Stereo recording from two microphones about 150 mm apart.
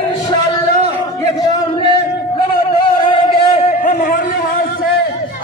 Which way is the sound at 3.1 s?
35° left (ahead or behind).